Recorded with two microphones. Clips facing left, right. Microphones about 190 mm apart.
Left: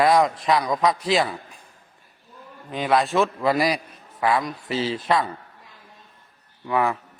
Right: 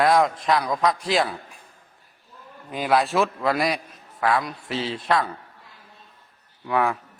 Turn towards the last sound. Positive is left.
turn(degrees=0)  # may be behind; listen again after turning